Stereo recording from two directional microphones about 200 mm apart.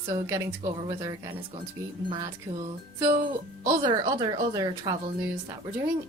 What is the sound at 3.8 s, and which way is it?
Speech, 20° right (ahead or behind).